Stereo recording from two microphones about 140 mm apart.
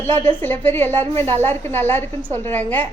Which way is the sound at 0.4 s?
15° left (ahead or behind).